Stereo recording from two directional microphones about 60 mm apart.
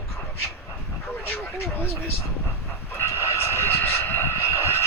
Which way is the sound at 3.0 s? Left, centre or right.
Left.